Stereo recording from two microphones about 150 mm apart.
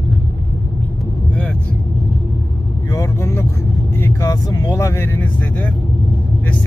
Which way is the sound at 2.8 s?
20° left (ahead or behind).